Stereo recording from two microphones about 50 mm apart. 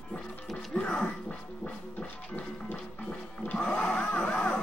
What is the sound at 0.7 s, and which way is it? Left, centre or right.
Music, left.